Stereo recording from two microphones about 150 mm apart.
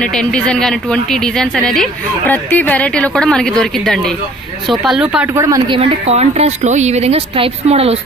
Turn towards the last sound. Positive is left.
turn(degrees=-40)  # may be behind; listen again after turning